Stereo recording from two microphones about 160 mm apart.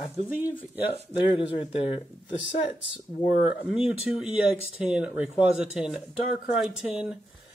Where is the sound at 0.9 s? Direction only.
30° left (ahead or behind).